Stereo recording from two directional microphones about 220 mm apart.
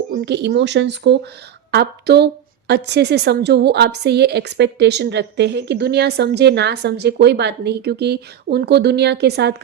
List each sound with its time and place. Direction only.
0.3 s a woman's voice: 50° right (ahead or behind)